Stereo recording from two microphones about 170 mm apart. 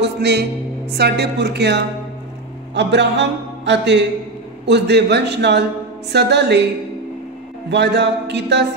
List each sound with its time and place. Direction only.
0.0 s a man's voice: 80° right
7.7 s a man's voice: 90° right